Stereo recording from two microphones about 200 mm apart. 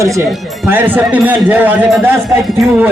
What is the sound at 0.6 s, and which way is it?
Speech, 10° right (ahead or behind).